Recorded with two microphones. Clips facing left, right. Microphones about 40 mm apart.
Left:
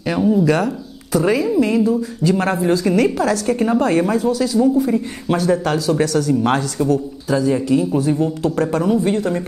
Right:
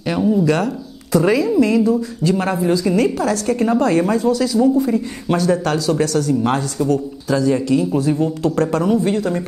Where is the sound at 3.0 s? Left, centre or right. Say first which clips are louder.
Left 1 dB; left.